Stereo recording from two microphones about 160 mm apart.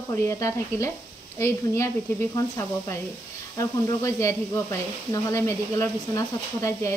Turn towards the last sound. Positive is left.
turn(degrees=20)  # may be behind; listen again after turning